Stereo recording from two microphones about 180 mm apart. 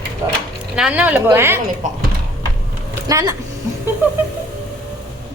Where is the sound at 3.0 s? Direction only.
20° right (ahead or behind).